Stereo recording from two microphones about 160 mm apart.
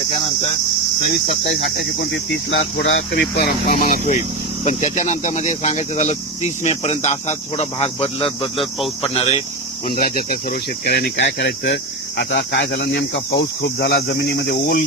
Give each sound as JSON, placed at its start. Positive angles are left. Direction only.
{"t": 1.7, "sound": "speech", "side_deg": 90}
{"t": 3.7, "sound": "speech", "side_deg": 55}
{"t": 10.0, "sound": "speech", "side_deg": 60}